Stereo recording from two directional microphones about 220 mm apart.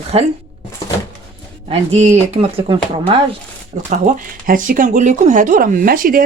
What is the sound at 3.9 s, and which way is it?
Speech, 35° right (ahead or behind).